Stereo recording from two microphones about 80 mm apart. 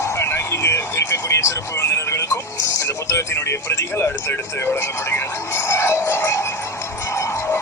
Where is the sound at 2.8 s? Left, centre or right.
Left.